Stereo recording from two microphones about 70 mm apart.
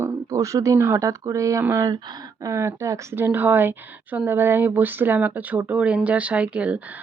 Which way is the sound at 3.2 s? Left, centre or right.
Right.